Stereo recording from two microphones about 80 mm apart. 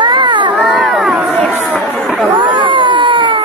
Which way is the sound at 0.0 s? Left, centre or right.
Right.